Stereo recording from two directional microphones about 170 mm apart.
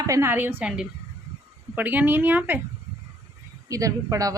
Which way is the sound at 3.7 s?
20° right (ahead or behind).